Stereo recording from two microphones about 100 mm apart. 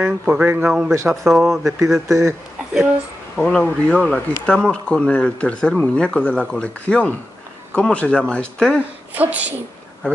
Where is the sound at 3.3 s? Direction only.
10° left (ahead or behind).